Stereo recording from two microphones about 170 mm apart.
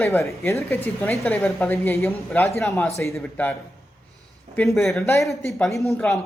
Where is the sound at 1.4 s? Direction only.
15° left (ahead or behind).